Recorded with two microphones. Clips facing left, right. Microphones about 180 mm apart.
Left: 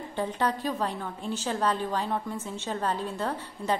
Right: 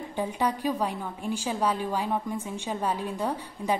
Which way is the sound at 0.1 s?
10° right (ahead or behind).